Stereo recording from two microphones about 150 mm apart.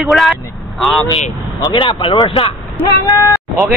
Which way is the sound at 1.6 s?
25° left (ahead or behind).